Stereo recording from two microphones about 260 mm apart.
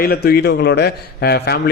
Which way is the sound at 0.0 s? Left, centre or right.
Left.